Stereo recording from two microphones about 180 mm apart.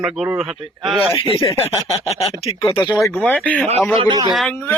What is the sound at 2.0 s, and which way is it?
Speech, 35° left (ahead or behind).